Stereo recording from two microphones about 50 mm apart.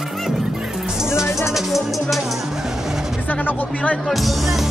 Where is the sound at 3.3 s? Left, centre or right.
Left.